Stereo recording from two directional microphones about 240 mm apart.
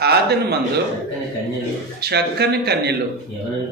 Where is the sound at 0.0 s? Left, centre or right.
Right.